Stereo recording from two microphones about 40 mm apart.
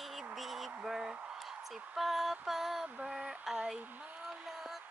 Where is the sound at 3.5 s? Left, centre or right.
Centre.